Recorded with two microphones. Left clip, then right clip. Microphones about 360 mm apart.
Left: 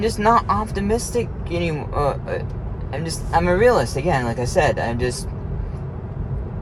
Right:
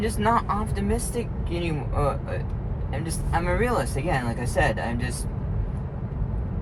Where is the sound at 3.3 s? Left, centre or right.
Left.